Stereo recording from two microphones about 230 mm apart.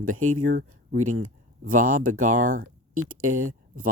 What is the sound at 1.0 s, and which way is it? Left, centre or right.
Speech, right.